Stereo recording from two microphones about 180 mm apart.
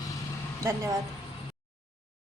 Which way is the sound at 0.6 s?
15° right (ahead or behind).